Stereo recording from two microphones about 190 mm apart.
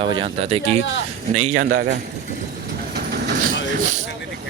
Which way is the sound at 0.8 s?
75° left (ahead or behind).